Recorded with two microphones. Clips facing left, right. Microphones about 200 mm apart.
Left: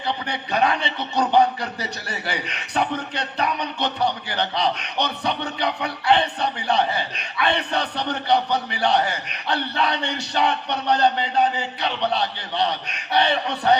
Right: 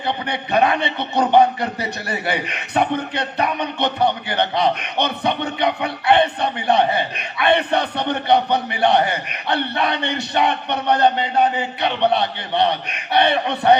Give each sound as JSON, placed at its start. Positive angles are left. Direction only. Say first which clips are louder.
{"t": 0.3, "sound": "a man's voice", "louder": "right 4 dB", "side_deg": -60}